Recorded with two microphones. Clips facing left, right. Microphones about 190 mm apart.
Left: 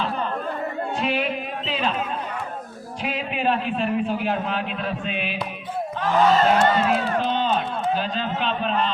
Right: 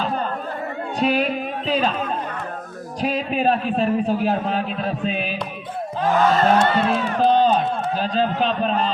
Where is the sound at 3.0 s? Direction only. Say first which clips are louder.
Right 5 dB; 40° right (ahead or behind).